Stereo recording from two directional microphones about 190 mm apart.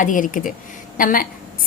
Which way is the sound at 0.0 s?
45° left (ahead or behind).